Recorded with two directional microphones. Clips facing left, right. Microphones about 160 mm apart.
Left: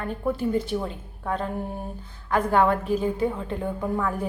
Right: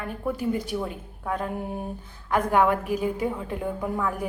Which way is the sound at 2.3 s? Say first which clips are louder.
Left 1 dB; 15° right (ahead or behind).